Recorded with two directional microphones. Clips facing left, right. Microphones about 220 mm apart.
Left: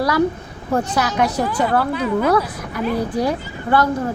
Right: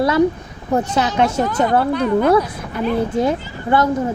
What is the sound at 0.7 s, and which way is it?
Speech, 25° right (ahead or behind).